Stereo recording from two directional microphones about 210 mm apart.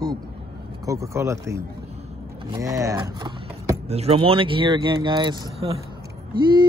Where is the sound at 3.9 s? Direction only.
30° right (ahead or behind).